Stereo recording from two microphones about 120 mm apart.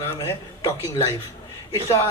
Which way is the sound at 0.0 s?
25° left (ahead or behind).